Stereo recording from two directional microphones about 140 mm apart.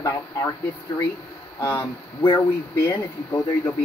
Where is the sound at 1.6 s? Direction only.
15° left (ahead or behind).